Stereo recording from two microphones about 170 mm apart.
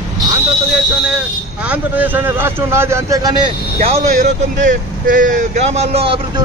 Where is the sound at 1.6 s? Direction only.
10° right (ahead or behind).